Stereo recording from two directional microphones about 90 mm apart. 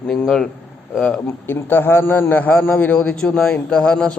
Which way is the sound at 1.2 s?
25° left (ahead or behind).